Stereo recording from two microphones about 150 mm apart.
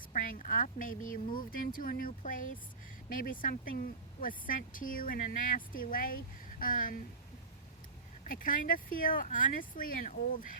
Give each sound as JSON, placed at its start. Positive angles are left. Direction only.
{"t": 0.1, "sound": "speech", "side_deg": 60}
{"t": 8.2, "sound": "speech", "side_deg": 65}